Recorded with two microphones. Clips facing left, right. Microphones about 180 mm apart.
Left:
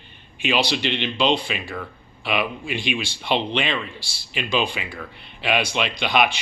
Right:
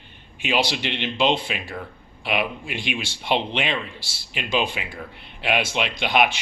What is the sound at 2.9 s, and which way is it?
Speech, 15° right (ahead or behind).